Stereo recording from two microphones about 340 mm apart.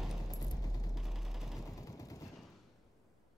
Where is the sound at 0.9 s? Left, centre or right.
Centre.